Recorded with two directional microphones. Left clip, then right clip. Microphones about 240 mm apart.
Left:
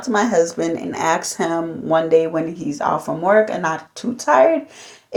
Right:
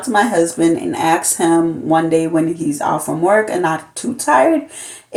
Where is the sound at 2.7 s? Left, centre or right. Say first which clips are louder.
Right 2 dB; centre.